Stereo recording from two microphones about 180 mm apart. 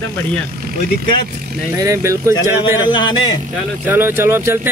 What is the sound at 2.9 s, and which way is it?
Speech, 25° left (ahead or behind).